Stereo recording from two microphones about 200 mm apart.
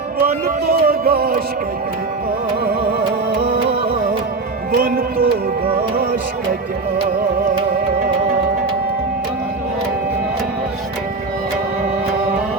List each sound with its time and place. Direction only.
0.2 s speech: 50° right (ahead or behind)
3.7 s music: 30° right (ahead or behind)
4.8 s speech: 45° right (ahead or behind)